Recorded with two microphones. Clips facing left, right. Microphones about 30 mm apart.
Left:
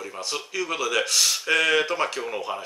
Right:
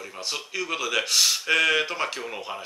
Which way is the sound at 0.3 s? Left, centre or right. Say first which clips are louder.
Left 1 dB; centre.